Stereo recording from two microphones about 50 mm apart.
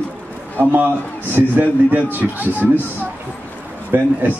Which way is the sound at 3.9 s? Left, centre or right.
Right.